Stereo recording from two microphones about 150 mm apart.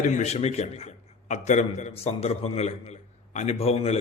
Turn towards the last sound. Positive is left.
turn(degrees=45)  # may be behind; listen again after turning